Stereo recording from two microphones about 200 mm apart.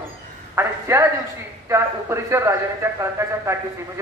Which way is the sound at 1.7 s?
15° right (ahead or behind).